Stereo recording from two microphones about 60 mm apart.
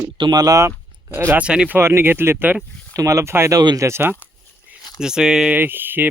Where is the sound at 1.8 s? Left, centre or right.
Right.